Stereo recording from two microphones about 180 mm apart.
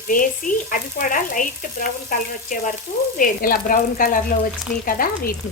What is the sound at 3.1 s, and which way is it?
Speech, 50° left (ahead or behind).